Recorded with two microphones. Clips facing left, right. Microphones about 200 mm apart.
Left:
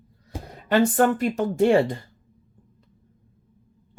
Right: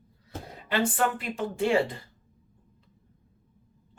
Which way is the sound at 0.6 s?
45° left (ahead or behind).